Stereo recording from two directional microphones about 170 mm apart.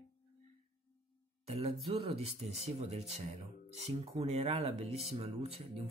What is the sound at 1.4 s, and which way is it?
Speech, 35° right (ahead or behind).